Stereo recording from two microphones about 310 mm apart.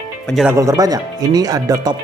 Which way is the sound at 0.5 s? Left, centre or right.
Centre.